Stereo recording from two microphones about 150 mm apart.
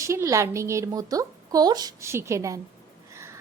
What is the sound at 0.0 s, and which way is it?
A woman's voice, 20° right (ahead or behind).